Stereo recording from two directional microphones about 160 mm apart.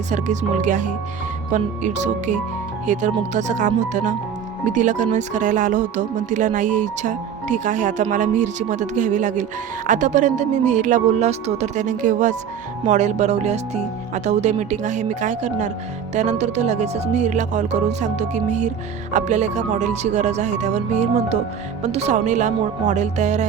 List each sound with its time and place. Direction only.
0.1 s speech: 50° right (ahead or behind)